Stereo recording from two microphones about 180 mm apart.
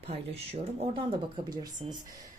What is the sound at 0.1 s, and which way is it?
A woman's voice, 35° right (ahead or behind).